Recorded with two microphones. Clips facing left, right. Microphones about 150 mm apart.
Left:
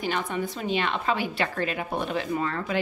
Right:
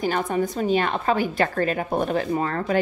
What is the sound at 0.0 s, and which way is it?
A woman's voice, 40° right (ahead or behind).